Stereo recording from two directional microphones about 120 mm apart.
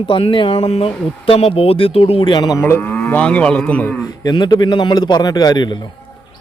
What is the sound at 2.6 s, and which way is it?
Moo, 15° left (ahead or behind).